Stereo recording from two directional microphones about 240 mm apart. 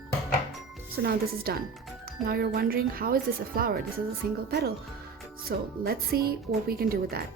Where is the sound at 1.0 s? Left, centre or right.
Right.